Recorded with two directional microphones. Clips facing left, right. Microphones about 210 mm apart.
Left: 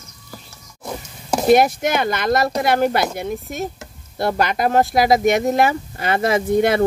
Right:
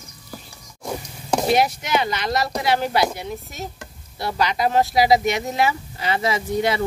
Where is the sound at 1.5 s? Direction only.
50° left (ahead or behind).